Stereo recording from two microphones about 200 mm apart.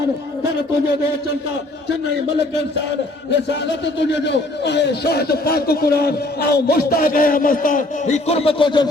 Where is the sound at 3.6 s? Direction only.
65° left (ahead or behind).